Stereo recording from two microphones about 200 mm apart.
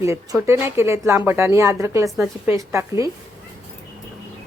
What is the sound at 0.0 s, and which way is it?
Speech, 15° right (ahead or behind).